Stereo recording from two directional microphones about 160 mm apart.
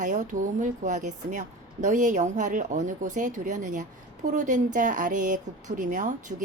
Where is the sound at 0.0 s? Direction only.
50° right (ahead or behind).